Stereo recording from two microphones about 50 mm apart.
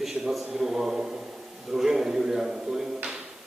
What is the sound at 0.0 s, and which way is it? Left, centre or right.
A man's voice, centre.